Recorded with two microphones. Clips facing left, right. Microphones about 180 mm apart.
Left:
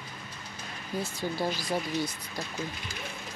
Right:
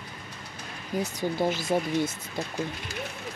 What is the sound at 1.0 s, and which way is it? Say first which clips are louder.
Speech: right 4 dB; 20° right (ahead or behind).